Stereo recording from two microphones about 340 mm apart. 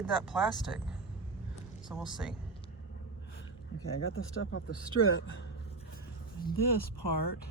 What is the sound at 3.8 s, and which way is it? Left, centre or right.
Speech, left.